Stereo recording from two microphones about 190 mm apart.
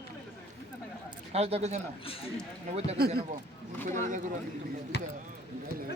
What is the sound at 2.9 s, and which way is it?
Speech, 55° right (ahead or behind).